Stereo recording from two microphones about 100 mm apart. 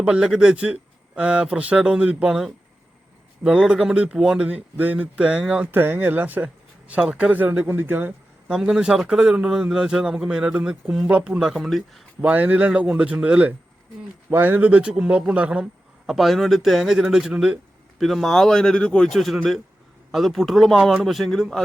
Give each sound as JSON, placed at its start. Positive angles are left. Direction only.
{"t": 0.0, "sound": "a man's voice", "side_deg": -10}
{"t": 5.7, "sound": "a man's voice", "side_deg": -20}
{"t": 8.5, "sound": "a man's voice", "side_deg": -5}
{"t": 12.2, "sound": "a man's voice", "side_deg": -15}